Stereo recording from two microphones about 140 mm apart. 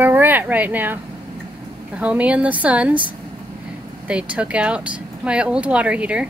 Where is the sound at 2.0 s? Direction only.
10° right (ahead or behind).